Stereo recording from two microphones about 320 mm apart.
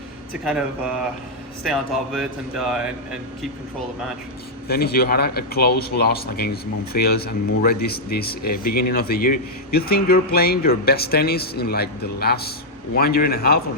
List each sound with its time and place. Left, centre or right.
1.6 s speech: centre
4.7 s speech: left